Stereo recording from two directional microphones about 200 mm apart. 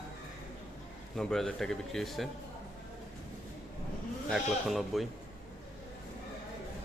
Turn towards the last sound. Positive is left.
turn(degrees=0)  # may be behind; listen again after turning